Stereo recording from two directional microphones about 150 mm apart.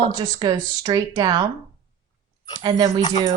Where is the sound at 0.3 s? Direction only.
25° right (ahead or behind).